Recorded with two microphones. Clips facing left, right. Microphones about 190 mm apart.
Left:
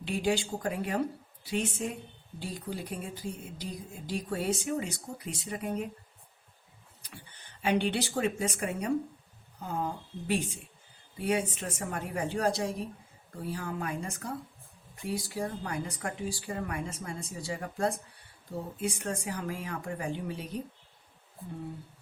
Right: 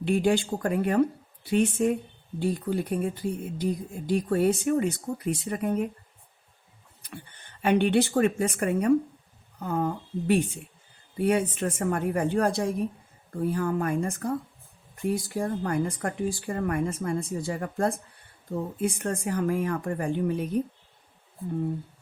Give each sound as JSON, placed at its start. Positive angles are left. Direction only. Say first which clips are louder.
{"t": 0.0, "sound": "speech", "louder": "right 6 dB", "side_deg": -55}
{"t": 7.6, "sound": "speech", "louder": "right 7 dB", "side_deg": -55}